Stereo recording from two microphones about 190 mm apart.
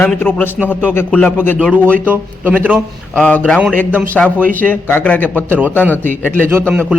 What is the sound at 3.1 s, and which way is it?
A man's voice, 5° left (ahead or behind).